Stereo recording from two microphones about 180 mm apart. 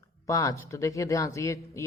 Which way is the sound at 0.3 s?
20° left (ahead or behind).